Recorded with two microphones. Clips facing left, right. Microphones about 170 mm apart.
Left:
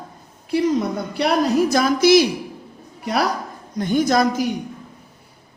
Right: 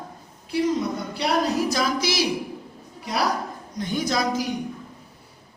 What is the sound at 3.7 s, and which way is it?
Speech, 55° left (ahead or behind).